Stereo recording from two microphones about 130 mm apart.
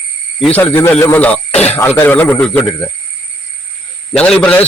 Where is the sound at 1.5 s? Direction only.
55° left (ahead or behind).